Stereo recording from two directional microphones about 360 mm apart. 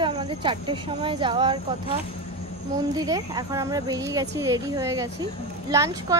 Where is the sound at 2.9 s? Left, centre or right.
Centre.